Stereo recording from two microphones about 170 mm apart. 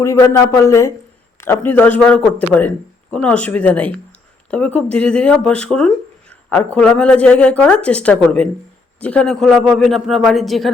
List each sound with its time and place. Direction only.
0.0 s a man's voice: 20° left (ahead or behind); by 10.7 s centre (ahead or behind)